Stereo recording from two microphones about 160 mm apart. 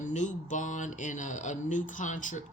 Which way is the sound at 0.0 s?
50° left (ahead or behind).